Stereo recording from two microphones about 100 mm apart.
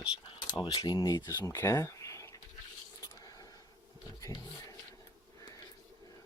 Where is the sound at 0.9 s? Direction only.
45° left (ahead or behind).